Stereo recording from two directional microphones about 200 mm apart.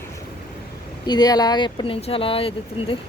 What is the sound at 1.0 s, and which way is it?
Speech, 20° left (ahead or behind).